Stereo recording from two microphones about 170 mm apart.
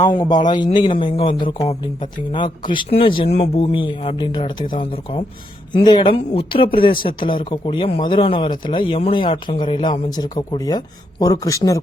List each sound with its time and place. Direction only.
0.0 s speech: 30° left (ahead or behind)